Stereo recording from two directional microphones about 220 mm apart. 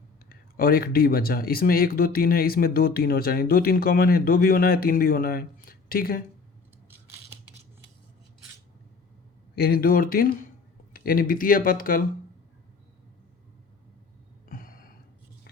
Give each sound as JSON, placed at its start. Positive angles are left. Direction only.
{"t": 0.3, "sound": "speech", "side_deg": 40}
{"t": 9.6, "sound": "speech", "side_deg": 45}
{"t": 14.5, "sound": "a sound", "side_deg": 40}